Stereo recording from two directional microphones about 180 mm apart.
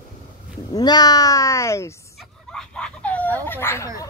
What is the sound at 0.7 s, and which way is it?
Speech, 20° left (ahead or behind).